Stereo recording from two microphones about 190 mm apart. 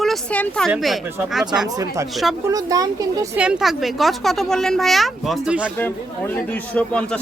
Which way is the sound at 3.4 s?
5° right (ahead or behind).